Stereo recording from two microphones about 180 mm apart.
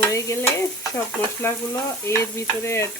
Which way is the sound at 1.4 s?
15° left (ahead or behind).